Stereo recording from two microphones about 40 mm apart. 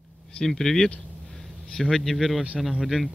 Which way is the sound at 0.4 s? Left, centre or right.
Centre.